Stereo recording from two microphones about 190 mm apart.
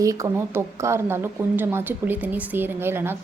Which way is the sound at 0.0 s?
15° right (ahead or behind).